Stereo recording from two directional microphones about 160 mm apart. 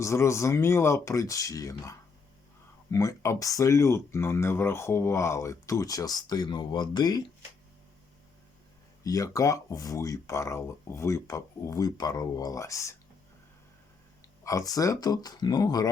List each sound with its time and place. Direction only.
0.0 s speech: 20° left (ahead or behind)
9.0 s speech: 20° left (ahead or behind)
14.4 s speech: 20° left (ahead or behind)